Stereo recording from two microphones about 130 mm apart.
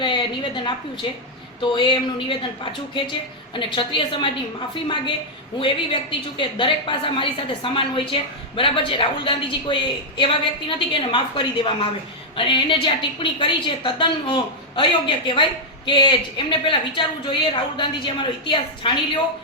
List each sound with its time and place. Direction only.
0.0 s a woman's voice: 35° left (ahead or behind)
1.7 s a woman's voice: 35° left (ahead or behind)